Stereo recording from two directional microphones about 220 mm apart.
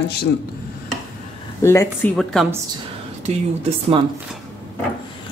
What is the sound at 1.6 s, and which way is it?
Speech, 10° left (ahead or behind).